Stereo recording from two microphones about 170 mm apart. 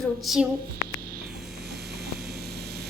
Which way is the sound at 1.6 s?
70° right (ahead or behind).